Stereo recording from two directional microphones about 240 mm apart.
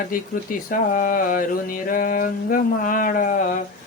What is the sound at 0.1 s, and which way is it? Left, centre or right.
Speech, left.